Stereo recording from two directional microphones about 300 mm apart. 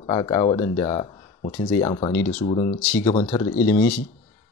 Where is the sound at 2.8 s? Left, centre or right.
Centre.